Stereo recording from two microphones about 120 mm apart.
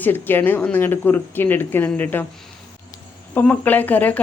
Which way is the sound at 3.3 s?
15° left (ahead or behind).